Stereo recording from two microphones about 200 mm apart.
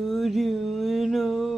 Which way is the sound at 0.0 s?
Centre (ahead or behind).